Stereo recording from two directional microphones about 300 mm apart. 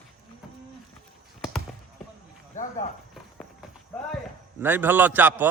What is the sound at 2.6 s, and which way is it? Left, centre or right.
Cricket, left.